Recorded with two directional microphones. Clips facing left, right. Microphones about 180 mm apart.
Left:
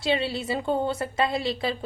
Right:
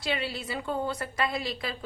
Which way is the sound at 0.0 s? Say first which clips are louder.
Left 6 dB; 25° left (ahead or behind).